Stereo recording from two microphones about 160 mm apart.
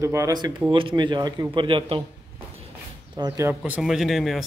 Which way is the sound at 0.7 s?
35° right (ahead or behind).